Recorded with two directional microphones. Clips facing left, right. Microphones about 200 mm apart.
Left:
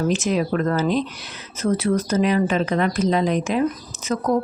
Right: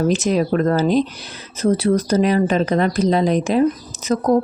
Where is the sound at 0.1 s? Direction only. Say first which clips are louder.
Right 3 dB; 35° right (ahead or behind).